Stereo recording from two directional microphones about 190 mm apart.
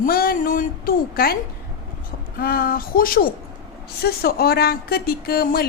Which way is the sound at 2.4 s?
50° left (ahead or behind).